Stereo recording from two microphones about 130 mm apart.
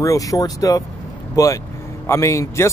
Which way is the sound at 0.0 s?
25° left (ahead or behind).